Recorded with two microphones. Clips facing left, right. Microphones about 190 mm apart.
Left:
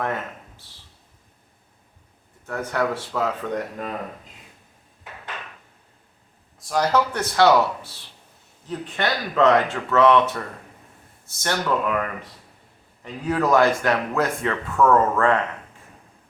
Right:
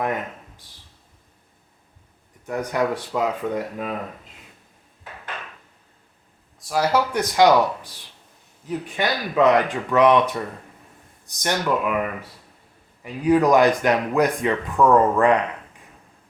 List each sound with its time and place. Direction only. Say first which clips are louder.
0.0 s speech: right 2 dB; 15° right (ahead or behind)
2.5 s speech: right 2 dB; 15° right (ahead or behind)
6.6 s speech: even; 5° right (ahead or behind)